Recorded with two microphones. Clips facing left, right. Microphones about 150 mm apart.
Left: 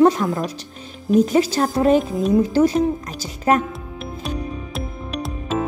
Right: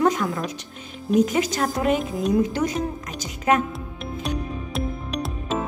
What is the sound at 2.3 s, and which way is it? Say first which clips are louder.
A woman's voice: left 7 dB; 30° left (ahead or behind).